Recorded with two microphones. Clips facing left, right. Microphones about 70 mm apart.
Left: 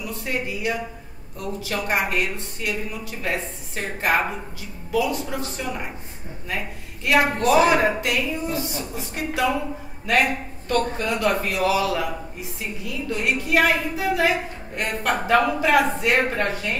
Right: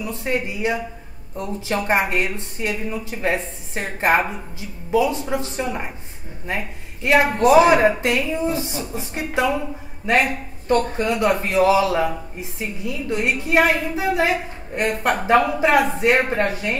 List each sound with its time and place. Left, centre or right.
0.0 s a man's voice: right
11.0 s a man's voice: right